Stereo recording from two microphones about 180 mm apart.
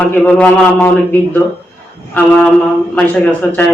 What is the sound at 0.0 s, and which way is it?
A man's voice, 10° left (ahead or behind).